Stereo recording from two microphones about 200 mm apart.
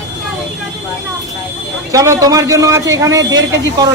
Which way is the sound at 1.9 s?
15° right (ahead or behind).